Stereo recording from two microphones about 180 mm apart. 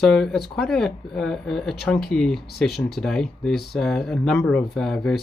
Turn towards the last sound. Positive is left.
turn(degrees=0)  # may be behind; listen again after turning